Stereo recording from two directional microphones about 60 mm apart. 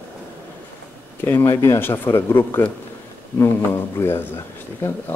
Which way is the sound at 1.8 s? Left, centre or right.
Left.